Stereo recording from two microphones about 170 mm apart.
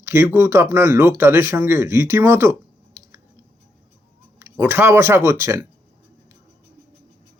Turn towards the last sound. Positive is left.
turn(degrees=-15)  # may be behind; listen again after turning